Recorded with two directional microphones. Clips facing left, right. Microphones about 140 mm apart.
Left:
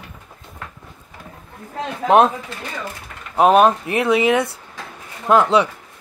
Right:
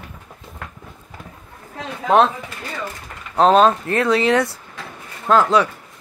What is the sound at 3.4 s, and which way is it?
Speech, 10° left (ahead or behind).